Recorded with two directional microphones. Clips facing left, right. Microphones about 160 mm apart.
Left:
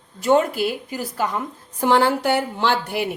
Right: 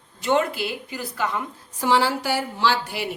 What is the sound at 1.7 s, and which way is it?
A woman's voice, 55° left (ahead or behind).